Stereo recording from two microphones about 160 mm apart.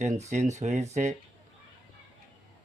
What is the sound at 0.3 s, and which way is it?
Speech, 45° right (ahead or behind).